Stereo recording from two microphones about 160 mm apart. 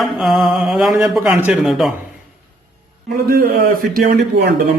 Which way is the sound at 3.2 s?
65° right (ahead or behind).